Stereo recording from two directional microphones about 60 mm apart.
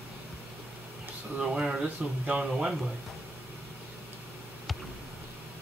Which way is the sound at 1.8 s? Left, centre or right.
Centre.